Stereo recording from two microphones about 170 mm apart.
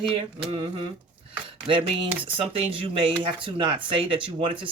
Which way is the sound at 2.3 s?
30° right (ahead or behind).